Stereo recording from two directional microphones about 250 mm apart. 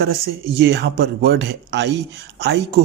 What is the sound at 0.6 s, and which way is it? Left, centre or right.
Speech, right.